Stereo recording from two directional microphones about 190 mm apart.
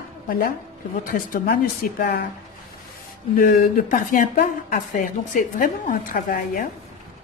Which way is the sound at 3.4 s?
45° left (ahead or behind).